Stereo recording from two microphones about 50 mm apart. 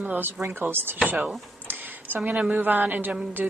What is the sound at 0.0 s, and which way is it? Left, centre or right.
Speech, right.